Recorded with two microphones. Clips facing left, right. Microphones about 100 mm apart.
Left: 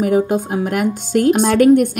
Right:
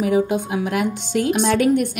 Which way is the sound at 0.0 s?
45° left (ahead or behind).